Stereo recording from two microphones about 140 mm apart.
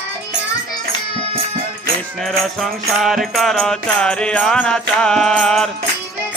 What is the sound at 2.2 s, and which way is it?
Music, centre (ahead or behind).